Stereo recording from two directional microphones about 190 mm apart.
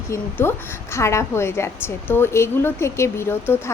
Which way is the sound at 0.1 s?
15° left (ahead or behind).